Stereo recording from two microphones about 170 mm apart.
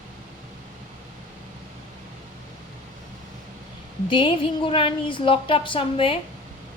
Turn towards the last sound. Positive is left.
turn(degrees=30)  # may be behind; listen again after turning